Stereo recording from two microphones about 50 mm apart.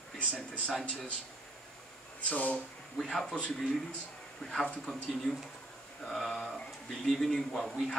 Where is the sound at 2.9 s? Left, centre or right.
Centre.